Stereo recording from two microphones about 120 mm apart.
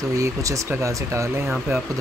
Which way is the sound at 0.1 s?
25° right (ahead or behind).